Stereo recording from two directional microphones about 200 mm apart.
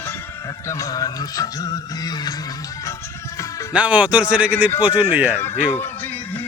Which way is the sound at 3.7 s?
5° right (ahead or behind).